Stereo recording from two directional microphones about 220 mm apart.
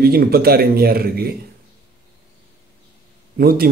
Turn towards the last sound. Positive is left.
turn(degrees=-45)  # may be behind; listen again after turning